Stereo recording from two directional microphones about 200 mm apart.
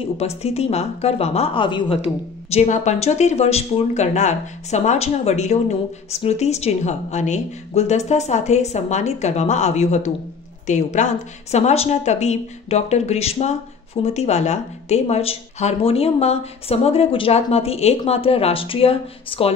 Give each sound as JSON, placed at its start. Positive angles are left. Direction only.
{"t": 0.0, "sound": "speech", "side_deg": 30}